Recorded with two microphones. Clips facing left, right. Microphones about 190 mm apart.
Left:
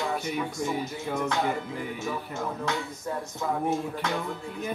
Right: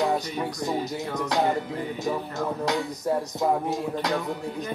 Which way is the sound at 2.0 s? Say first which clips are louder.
Right 6 dB; 40° right (ahead or behind).